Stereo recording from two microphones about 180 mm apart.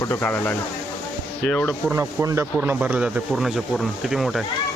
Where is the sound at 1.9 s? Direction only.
15° right (ahead or behind).